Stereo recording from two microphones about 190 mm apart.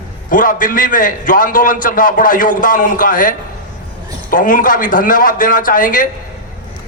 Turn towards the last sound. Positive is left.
turn(degrees=45)  # may be behind; listen again after turning